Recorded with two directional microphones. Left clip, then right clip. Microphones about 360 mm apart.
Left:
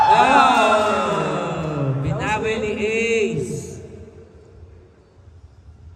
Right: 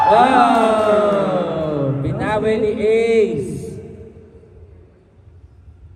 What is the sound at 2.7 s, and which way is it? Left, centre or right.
Mantra, centre.